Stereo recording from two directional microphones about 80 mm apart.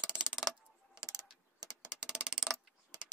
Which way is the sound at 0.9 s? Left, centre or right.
Right.